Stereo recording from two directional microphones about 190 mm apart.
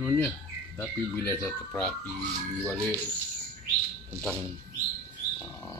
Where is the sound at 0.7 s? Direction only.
10° left (ahead or behind).